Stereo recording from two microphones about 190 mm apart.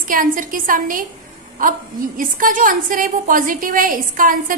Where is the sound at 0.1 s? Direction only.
45° right (ahead or behind).